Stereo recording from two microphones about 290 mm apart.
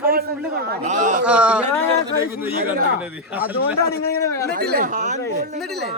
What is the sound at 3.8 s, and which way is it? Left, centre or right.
Speech, centre.